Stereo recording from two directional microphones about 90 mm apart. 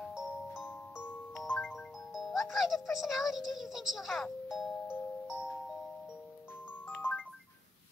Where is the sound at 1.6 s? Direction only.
Centre (ahead or behind).